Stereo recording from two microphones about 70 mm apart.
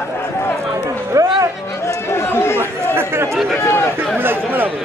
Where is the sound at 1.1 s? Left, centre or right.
Right.